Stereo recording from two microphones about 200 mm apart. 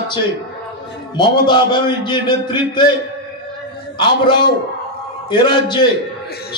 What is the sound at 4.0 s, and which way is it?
A man's voice, 20° left (ahead or behind).